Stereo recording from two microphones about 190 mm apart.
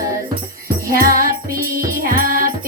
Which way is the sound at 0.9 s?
50° right (ahead or behind).